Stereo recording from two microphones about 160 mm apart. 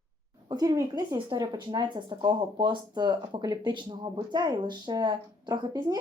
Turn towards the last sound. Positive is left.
turn(degrees=-25)  # may be behind; listen again after turning